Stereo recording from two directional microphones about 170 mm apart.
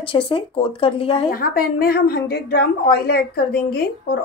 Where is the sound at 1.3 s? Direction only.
60° left (ahead or behind).